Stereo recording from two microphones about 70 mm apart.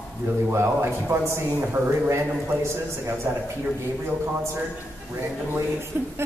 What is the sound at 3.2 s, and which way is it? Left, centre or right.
Speech, right.